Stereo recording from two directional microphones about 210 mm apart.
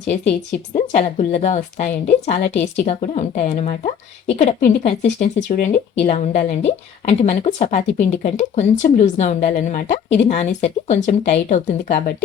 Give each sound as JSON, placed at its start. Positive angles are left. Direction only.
{"t": 0.1, "sound": "speech", "side_deg": 30}